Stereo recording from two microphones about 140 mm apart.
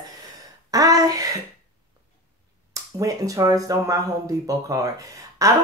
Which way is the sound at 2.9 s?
25° right (ahead or behind).